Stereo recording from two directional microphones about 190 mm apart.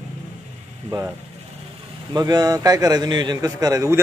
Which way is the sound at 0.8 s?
15° right (ahead or behind).